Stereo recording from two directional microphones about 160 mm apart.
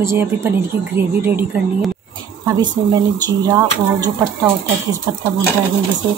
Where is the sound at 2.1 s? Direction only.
25° right (ahead or behind).